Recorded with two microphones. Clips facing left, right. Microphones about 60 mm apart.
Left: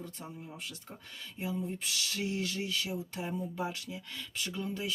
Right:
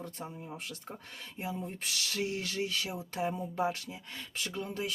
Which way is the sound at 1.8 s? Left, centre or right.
Right.